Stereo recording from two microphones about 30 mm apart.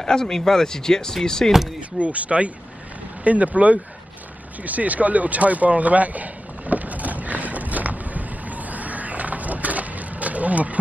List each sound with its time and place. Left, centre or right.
0.0 s speech: left
1.8 s speech: right
4.6 s a sound: right